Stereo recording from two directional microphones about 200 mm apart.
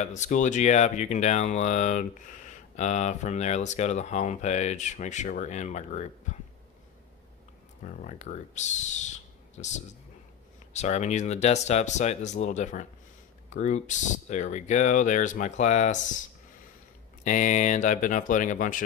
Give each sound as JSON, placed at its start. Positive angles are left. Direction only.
{"t": 0.0, "sound": "speech", "side_deg": 35}
{"t": 7.8, "sound": "speech", "side_deg": 40}
{"t": 17.2, "sound": "speech", "side_deg": 40}